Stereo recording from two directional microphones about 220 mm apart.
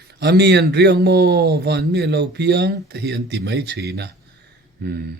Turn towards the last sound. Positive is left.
turn(degrees=-50)  # may be behind; listen again after turning